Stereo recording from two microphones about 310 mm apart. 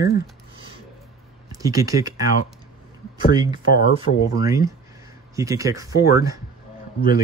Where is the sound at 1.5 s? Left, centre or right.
Centre.